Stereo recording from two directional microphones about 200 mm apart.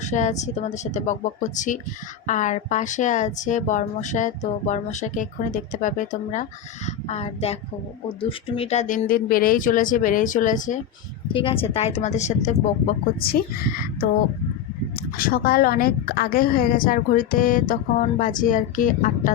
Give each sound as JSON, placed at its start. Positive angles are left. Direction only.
{"t": 0.0, "sound": "a woman's voice", "side_deg": 35}
{"t": 11.3, "sound": "a woman's voice", "side_deg": 25}
{"t": 15.2, "sound": "a woman's voice", "side_deg": 45}